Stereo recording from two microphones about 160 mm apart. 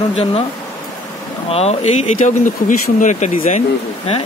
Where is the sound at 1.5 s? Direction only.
40° left (ahead or behind).